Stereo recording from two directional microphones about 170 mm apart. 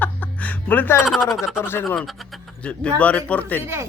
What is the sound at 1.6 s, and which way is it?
Speech, 15° left (ahead or behind).